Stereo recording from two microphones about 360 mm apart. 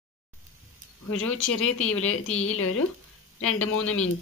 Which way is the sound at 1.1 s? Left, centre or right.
Left.